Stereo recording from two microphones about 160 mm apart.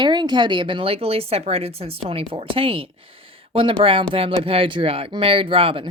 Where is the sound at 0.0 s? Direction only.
25° right (ahead or behind).